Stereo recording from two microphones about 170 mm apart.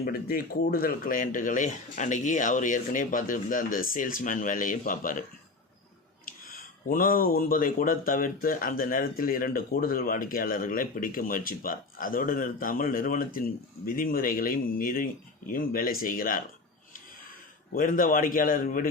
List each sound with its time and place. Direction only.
0.0 s speech: 60° left (ahead or behind)
6.2 s speech: 55° left (ahead or behind)
17.7 s speech: 55° left (ahead or behind)